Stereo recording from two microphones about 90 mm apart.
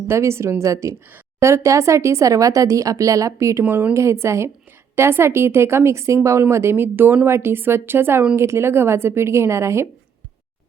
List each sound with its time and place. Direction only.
0.1 s speech: 30° right (ahead or behind)
3.6 s a woman's voice: 20° right (ahead or behind)